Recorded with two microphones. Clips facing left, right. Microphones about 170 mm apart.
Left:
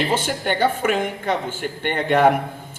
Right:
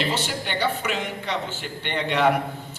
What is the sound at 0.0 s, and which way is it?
A woman's voice, 50° left (ahead or behind).